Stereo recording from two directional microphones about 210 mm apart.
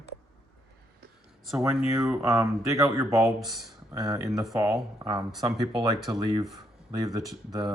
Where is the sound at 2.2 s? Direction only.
15° right (ahead or behind).